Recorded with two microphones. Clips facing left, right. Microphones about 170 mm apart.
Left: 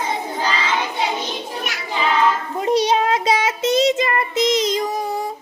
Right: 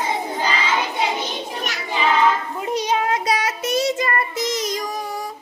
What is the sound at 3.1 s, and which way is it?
Child singing, 25° left (ahead or behind).